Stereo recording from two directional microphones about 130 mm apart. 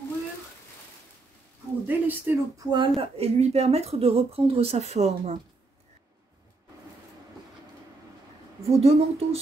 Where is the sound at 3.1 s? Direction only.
55° right (ahead or behind).